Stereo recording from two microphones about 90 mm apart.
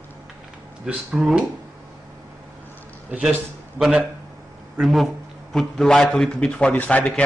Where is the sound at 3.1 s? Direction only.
15° right (ahead or behind).